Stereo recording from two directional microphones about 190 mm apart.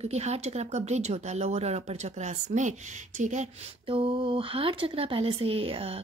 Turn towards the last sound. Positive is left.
turn(degrees=-30)  # may be behind; listen again after turning